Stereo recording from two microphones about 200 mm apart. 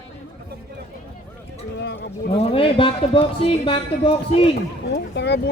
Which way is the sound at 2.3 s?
30° left (ahead or behind).